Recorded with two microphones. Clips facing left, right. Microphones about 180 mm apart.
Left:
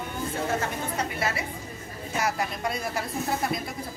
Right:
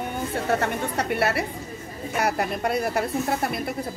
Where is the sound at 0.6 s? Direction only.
65° right (ahead or behind).